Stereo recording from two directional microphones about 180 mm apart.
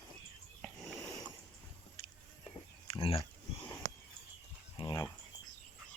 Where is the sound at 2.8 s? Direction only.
30° left (ahead or behind).